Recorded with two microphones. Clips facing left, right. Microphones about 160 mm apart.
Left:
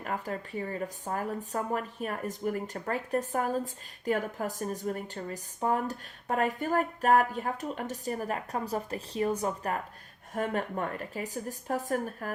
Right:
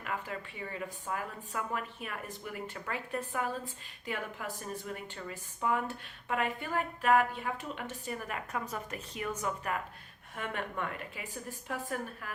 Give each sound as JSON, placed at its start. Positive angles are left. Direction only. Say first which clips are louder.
{"t": 0.0, "sound": "speech", "louder": "left 4 dB", "side_deg": 40}